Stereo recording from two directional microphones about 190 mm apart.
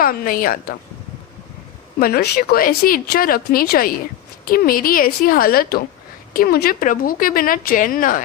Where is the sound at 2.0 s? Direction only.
50° left (ahead or behind).